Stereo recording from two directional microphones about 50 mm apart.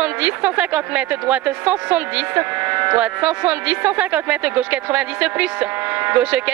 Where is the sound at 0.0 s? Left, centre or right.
Right.